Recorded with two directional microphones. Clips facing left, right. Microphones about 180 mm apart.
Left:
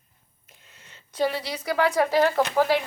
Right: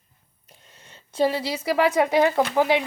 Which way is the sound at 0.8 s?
30° right (ahead or behind).